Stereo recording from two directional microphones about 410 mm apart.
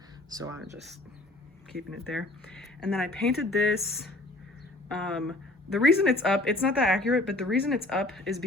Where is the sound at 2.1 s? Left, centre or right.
Centre.